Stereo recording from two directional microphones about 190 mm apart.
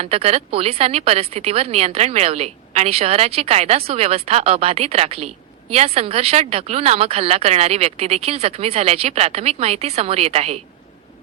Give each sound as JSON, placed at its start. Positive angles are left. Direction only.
{"t": 0.0, "sound": "speech", "side_deg": -30}